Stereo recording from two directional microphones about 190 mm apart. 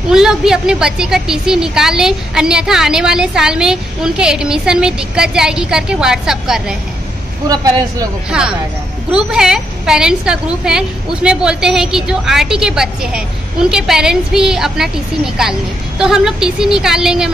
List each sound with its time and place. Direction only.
0.1 s a woman's voice: 5° right (ahead or behind)
7.4 s speech: 20° right (ahead or behind)
8.3 s a woman's voice: 5° right (ahead or behind)
16.0 s a woman's voice: 5° right (ahead or behind)